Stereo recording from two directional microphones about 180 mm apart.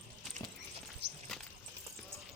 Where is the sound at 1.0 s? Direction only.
70° right (ahead or behind).